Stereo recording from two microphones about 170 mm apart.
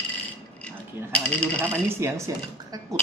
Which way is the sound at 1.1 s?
5° left (ahead or behind).